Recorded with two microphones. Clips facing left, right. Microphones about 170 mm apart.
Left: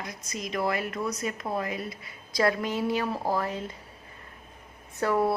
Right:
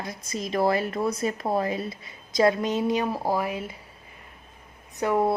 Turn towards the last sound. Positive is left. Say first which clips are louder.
# right 2 dB
turn(degrees=-20)  # may be behind; listen again after turning